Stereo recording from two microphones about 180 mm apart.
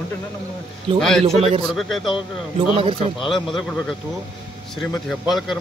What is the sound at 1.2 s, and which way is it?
Speech, 35° right (ahead or behind).